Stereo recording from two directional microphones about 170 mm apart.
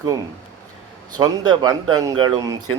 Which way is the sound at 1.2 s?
25° right (ahead or behind).